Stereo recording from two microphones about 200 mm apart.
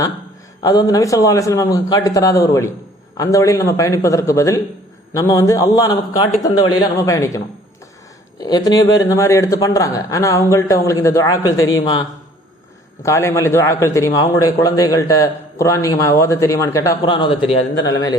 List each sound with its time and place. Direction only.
0.6 s a man's voice: 20° left (ahead or behind)
11.4 s a man's voice: 90° left
11.8 s a man's voice: 20° left (ahead or behind)